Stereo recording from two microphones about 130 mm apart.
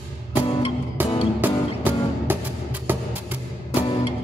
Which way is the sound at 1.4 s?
15° right (ahead or behind).